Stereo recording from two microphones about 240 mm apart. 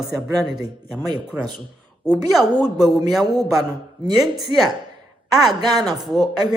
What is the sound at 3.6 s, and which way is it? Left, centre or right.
Speech, centre.